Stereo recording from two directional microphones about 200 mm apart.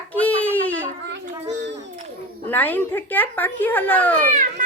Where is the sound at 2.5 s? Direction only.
10° left (ahead or behind).